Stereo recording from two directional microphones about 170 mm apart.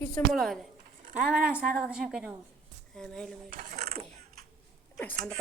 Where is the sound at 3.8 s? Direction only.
35° right (ahead or behind).